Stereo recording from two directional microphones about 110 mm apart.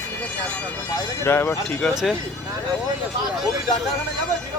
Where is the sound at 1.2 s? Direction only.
20° left (ahead or behind).